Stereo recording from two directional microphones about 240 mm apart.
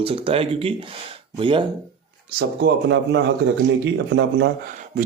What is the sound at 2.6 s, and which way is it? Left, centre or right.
Speech, right.